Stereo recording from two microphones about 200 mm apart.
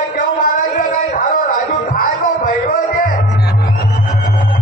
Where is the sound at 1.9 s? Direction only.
45° left (ahead or behind).